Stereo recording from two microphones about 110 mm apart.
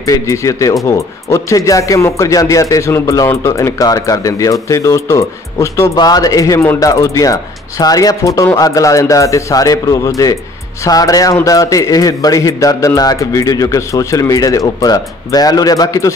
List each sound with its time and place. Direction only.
0.0 s speech: 30° left (ahead or behind)
5.9 s speech: 35° left (ahead or behind)